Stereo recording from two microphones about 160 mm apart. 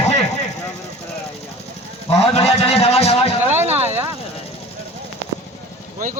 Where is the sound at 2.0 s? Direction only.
40° left (ahead or behind).